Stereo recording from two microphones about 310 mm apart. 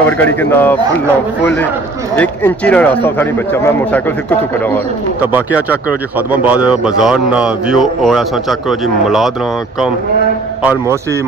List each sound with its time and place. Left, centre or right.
0.0 s a man's voice: centre
5.3 s a man's voice: centre
10.6 s a man's voice: centre